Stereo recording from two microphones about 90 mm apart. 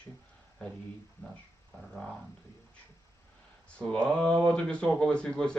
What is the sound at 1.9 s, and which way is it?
Speech, 5° left (ahead or behind).